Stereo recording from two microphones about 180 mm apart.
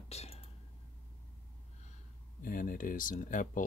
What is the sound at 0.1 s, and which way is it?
Whispering, 35° left (ahead or behind).